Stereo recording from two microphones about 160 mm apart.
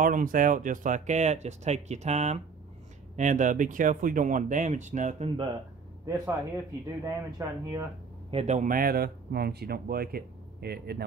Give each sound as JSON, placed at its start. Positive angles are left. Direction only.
{"t": 0.0, "sound": "speech", "side_deg": -60}
{"t": 6.0, "sound": "speech", "side_deg": -20}
{"t": 8.3, "sound": "speech", "side_deg": -40}